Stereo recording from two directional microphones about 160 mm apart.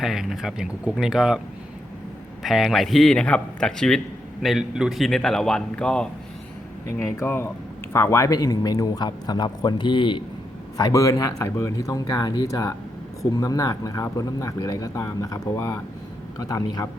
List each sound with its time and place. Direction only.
0.0 s speech: centre (ahead or behind)
2.4 s speech: centre (ahead or behind); by 16.9 s 20° left (ahead or behind)